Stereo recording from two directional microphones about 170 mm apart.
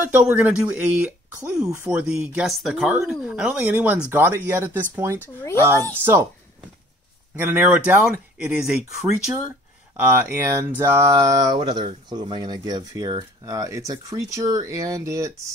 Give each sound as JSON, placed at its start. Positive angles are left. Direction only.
{"t": 0.0, "sound": "speech", "side_deg": -10}
{"t": 7.3, "sound": "speech", "side_deg": -10}